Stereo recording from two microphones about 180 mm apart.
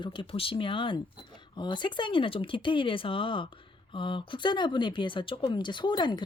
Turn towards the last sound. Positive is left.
turn(degrees=25)  # may be behind; listen again after turning